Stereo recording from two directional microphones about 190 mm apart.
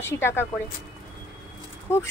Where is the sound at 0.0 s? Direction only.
10° left (ahead or behind).